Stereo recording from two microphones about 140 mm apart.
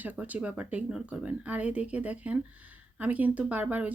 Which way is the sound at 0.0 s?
10° right (ahead or behind).